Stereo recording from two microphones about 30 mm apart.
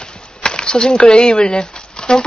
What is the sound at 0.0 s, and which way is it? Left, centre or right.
Speech, left.